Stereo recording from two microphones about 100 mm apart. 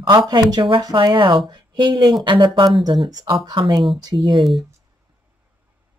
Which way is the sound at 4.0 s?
40° right (ahead or behind).